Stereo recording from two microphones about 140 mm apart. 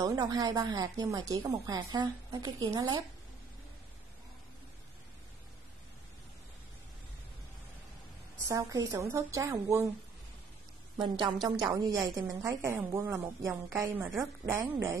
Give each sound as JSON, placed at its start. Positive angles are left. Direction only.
{"t": 0.0, "sound": "speech", "side_deg": -25}
{"t": 8.5, "sound": "speech", "side_deg": -25}
{"t": 11.0, "sound": "a woman's voice", "side_deg": -30}